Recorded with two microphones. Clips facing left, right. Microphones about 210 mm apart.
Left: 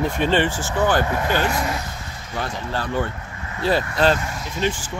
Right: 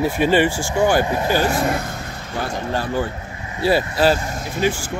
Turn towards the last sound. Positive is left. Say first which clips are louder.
# right 3 dB
turn(degrees=-10)  # may be behind; listen again after turning